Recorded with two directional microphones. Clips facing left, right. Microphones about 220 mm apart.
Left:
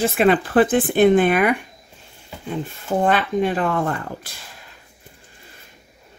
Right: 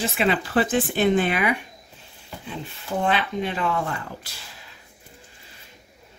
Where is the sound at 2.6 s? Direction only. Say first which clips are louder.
Left 5 dB; 50° left (ahead or behind).